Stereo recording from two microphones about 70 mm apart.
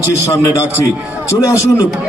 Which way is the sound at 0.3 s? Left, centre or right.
Left.